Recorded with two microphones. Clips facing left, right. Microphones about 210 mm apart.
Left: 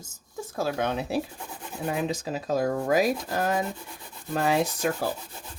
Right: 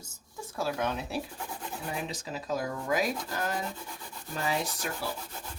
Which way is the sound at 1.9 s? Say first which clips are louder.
Left 9 dB; 50° left (ahead or behind).